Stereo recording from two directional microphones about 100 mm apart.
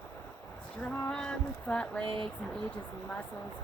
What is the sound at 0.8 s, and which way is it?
Speech, 15° left (ahead or behind).